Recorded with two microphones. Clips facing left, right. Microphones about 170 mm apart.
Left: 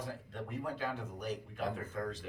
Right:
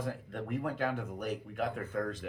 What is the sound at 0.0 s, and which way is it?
Speech, 55° right (ahead or behind).